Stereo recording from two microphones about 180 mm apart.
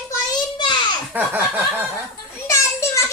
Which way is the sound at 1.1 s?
10° right (ahead or behind).